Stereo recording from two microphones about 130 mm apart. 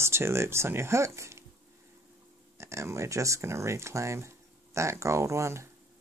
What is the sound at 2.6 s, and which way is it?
Speech, 20° right (ahead or behind).